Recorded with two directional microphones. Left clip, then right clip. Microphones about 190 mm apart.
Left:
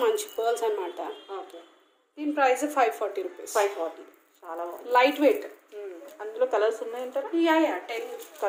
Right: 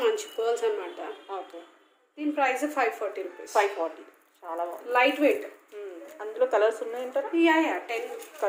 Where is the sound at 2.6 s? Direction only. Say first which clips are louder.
Left 2 dB; 55° left (ahead or behind).